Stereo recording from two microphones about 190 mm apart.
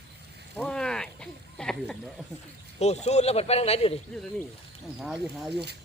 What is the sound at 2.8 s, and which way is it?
Speech, 35° left (ahead or behind).